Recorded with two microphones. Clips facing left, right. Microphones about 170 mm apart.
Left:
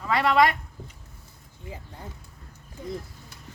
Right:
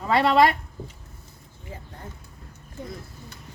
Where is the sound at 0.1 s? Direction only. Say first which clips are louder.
Right 2 dB; 30° right (ahead or behind).